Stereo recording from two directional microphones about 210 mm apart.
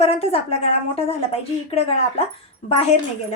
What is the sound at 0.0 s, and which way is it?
A woman's voice, 30° left (ahead or behind).